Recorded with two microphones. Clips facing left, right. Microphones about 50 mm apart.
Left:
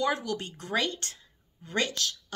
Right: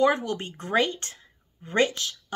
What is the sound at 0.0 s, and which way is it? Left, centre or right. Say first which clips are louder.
A woman's voice: right 6 dB; right.